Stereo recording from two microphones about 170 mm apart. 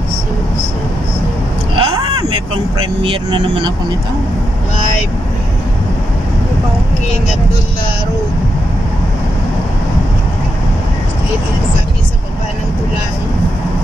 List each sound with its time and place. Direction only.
1.8 s vehicle: 25° right (ahead or behind)
3.0 s speech: 30° right (ahead or behind)